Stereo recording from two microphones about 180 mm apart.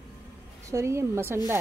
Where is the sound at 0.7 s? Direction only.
15° right (ahead or behind).